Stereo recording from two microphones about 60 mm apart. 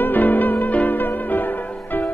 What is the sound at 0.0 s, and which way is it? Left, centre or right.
Music, left.